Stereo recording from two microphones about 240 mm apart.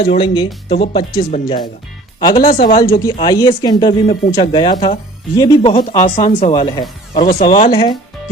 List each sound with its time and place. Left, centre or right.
0.0 s speech: left
2.5 s speech: left
2.8 s speech: centre; by 7.7 s left
7.7 s speech: left